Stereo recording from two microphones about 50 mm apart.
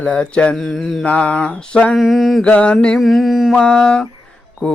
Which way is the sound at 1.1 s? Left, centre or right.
Left.